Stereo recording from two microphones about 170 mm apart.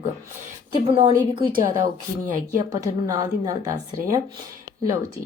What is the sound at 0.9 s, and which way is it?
Speech, 35° right (ahead or behind).